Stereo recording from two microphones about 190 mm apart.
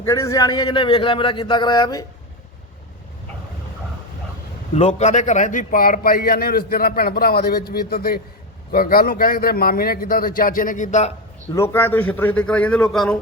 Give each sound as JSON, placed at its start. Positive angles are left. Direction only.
{"t": 0.0, "sound": "a man's voice", "side_deg": 15}
{"t": 4.7, "sound": "a man's voice", "side_deg": 35}
{"t": 11.5, "sound": "a man's voice", "side_deg": 10}